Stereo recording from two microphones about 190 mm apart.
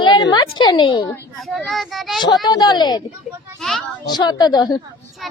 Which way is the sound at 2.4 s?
20° left (ahead or behind).